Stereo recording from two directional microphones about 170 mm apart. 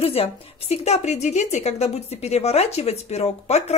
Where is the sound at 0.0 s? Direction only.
35° left (ahead or behind).